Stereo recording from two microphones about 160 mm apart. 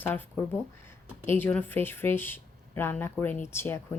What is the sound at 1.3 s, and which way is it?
A woman's voice, 10° left (ahead or behind).